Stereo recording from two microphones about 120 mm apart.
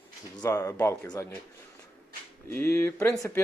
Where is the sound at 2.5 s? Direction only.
20° left (ahead or behind).